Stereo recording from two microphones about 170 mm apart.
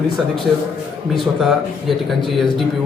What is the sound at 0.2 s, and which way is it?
A man's voice, centre (ahead or behind).